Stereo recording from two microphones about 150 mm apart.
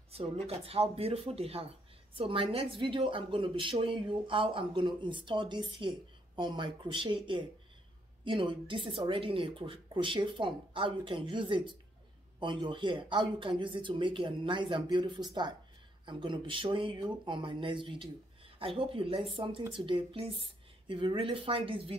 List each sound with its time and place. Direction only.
0.1 s speech: 40° right (ahead or behind)